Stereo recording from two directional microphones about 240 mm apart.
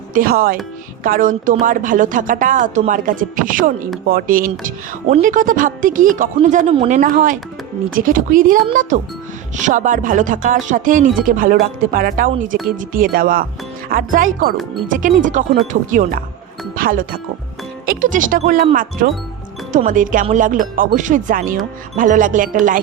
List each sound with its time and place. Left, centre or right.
0.1 s a woman's voice: right